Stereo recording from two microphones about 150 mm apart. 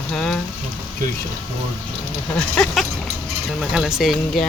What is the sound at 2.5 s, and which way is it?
Speech, 5° left (ahead or behind).